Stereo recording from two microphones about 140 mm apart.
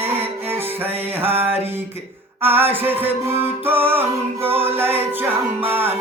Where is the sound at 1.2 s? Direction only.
15° right (ahead or behind).